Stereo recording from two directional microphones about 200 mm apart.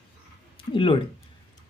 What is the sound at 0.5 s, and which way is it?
Speech, 25° left (ahead or behind).